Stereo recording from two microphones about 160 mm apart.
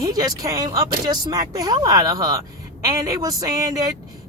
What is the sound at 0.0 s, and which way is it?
Speech, 20° right (ahead or behind).